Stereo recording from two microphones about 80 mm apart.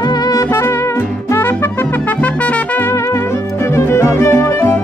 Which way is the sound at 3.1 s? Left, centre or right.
Left.